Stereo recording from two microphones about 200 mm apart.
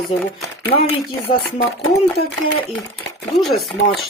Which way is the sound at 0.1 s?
25° left (ahead or behind).